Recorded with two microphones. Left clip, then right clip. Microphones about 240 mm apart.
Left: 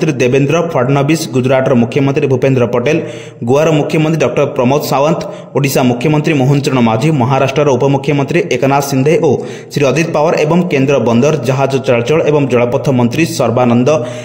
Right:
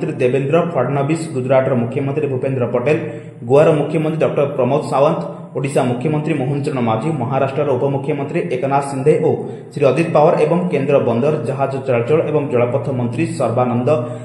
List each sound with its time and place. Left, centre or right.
0.0 s a man's voice: left